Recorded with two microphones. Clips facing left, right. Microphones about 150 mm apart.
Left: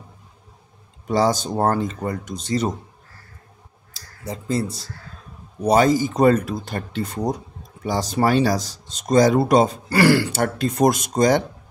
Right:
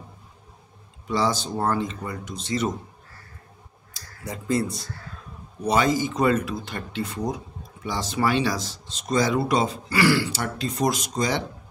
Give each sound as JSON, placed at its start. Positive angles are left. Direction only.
{"t": 1.0, "sound": "speech", "side_deg": 45}
{"t": 3.9, "sound": "clicking", "side_deg": 30}
{"t": 5.7, "sound": "speech", "side_deg": 40}